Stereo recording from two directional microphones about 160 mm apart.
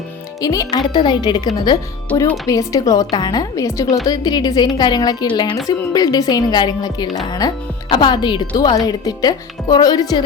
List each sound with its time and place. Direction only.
0.4 s a woman's voice: 20° left (ahead or behind)